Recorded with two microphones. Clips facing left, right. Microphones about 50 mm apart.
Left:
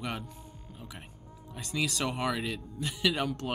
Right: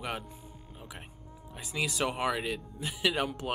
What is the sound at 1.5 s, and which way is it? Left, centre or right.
Speech, centre.